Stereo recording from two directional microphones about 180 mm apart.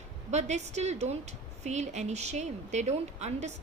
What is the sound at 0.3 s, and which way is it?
A woman's voice, 40° right (ahead or behind).